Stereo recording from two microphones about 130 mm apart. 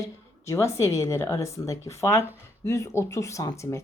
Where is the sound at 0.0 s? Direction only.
20° left (ahead or behind).